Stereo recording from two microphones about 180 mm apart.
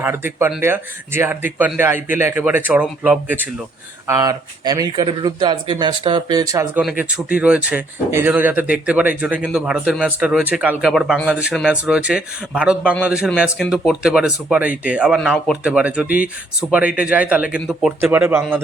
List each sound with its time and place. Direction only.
0.0 s speech: 10° right (ahead or behind)
6.7 s speech: 10° right (ahead or behind)